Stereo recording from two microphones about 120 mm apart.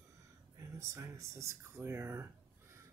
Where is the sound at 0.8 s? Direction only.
25° right (ahead or behind).